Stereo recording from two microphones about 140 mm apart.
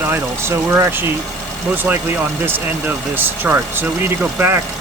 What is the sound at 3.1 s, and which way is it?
Speech, 15° right (ahead or behind).